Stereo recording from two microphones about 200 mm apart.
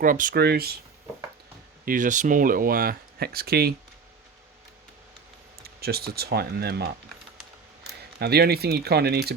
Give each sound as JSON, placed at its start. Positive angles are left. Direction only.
{"t": 0.0, "sound": "speech", "side_deg": -45}
{"t": 1.8, "sound": "speech", "side_deg": -45}
{"t": 5.6, "sound": "speech", "side_deg": -50}
{"t": 8.2, "sound": "speech", "side_deg": -55}